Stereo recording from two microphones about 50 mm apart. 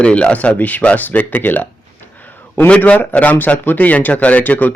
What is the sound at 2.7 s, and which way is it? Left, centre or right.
A man's voice, left.